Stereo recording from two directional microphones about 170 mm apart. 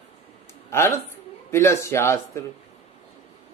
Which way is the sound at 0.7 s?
15° left (ahead or behind).